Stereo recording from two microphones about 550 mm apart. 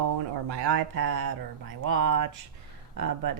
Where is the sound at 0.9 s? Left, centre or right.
Right.